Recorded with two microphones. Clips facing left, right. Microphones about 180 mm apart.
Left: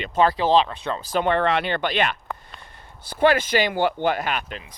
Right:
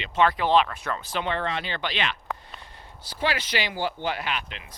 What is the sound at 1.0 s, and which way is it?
Speech, 45° left (ahead or behind).